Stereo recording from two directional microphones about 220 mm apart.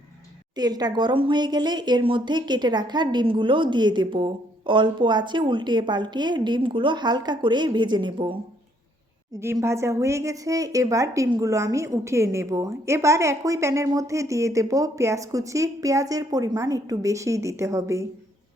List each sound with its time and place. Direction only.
0.5 s speech: 20° right (ahead or behind)
9.4 s a woman's voice: 10° right (ahead or behind)